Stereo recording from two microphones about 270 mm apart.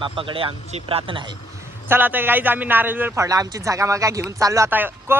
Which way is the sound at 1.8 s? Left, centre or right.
Centre.